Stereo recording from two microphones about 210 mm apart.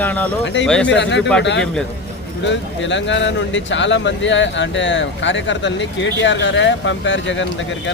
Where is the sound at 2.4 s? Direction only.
60° left (ahead or behind).